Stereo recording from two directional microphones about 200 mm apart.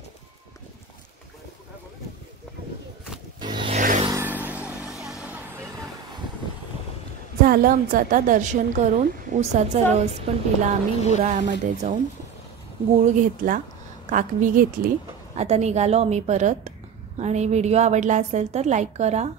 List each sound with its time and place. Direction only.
3.3 s zipper: 20° right (ahead or behind)
3.7 s vehicle: 40° right (ahead or behind)
4.0 s vehicle: 15° right (ahead or behind)
5.2 s music: 10° right (ahead or behind)
7.4 s a woman's voice: 45° right (ahead or behind)
13.1 s a woman's voice: 40° right (ahead or behind)